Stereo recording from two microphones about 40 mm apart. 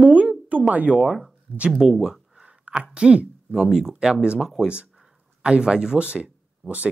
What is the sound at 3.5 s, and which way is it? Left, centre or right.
Speech, centre.